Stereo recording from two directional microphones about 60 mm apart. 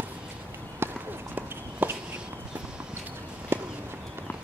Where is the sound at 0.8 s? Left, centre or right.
Right.